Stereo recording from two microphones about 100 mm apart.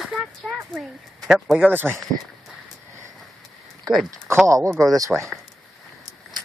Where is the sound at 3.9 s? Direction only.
5° left (ahead or behind).